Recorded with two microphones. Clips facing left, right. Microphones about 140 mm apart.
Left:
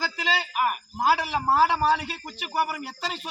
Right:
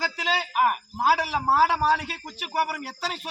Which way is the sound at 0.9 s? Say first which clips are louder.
Left 2 dB; 5° right (ahead or behind).